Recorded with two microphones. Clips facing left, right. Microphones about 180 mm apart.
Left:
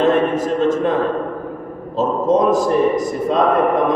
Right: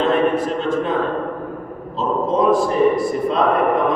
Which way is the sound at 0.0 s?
45° left (ahead or behind).